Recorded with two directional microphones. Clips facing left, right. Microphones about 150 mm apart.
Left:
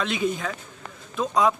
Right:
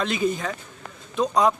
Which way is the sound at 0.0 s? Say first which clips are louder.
Right 2 dB; centre (ahead or behind).